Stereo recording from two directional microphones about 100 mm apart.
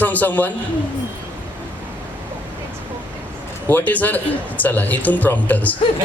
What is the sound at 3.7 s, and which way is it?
A child's voice, 20° left (ahead or behind).